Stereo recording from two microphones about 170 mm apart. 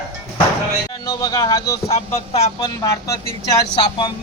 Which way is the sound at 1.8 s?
35° left (ahead or behind).